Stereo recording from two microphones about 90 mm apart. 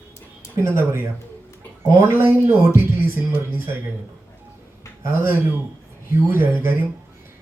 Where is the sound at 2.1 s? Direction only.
25° right (ahead or behind).